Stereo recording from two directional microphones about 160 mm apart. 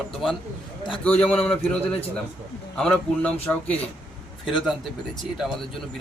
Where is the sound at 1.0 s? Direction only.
10° left (ahead or behind).